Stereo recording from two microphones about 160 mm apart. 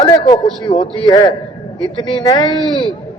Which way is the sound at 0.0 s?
25° left (ahead or behind).